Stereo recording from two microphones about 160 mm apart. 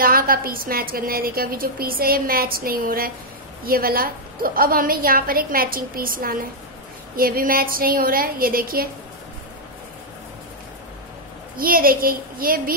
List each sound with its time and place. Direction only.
0.0 s a woman's voice: 65° right (ahead or behind)
11.5 s a woman's voice: 65° right (ahead or behind)